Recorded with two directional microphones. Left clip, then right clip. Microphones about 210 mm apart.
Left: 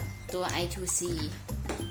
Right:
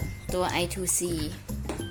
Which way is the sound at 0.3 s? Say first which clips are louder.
Right 4 dB; 35° right (ahead or behind).